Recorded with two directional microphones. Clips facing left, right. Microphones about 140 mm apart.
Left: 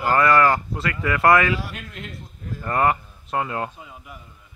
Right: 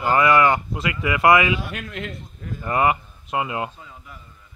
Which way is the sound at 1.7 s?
85° right.